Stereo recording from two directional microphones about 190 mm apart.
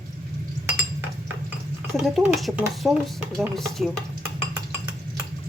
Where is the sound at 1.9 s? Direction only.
Centre (ahead or behind).